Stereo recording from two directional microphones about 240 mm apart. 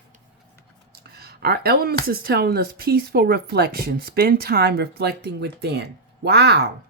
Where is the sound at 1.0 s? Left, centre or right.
Right.